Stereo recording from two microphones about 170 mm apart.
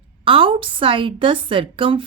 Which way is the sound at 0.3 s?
30° right (ahead or behind).